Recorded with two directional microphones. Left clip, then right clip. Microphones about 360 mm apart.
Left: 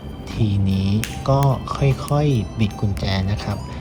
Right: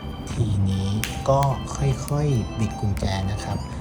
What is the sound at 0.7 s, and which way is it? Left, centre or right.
Music, centre.